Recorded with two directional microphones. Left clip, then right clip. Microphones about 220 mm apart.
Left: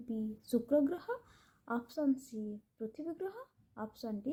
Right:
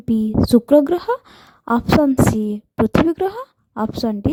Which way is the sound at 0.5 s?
45° right (ahead or behind).